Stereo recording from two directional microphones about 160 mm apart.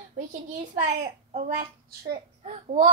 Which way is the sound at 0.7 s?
50° right (ahead or behind).